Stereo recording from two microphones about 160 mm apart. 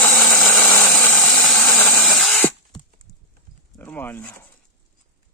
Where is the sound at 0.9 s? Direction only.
10° left (ahead or behind).